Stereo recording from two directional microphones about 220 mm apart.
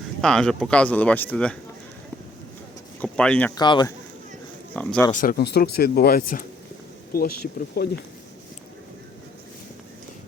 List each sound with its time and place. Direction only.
0.2 s speech: centre (ahead or behind)
3.0 s speech: 5° left (ahead or behind)
3.5 s speech: 20° left (ahead or behind)
4.7 s speech: 5° left (ahead or behind)
5.2 s speech: 45° left (ahead or behind)